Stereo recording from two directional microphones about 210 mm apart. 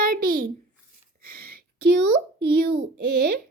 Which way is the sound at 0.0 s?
45° right (ahead or behind).